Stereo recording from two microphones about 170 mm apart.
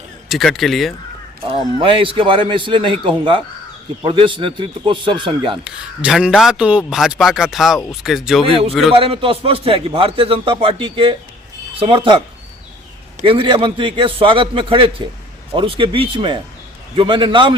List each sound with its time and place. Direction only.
0.3 s a man's voice: centre (ahead or behind)
1.4 s a man's voice: 30° right (ahead or behind)
5.6 s a man's voice: 5° right (ahead or behind)
8.9 s a man's voice: 35° right (ahead or behind)
13.2 s a man's voice: 30° right (ahead or behind)